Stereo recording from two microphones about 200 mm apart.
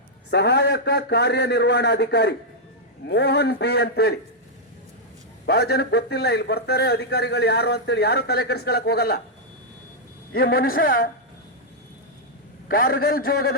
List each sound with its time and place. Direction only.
0.3 s a man's voice: 55° left (ahead or behind)
5.5 s a man's voice: 50° left (ahead or behind)
10.3 s a man's voice: 50° left (ahead or behind)
12.6 s a man's voice: 45° left (ahead or behind)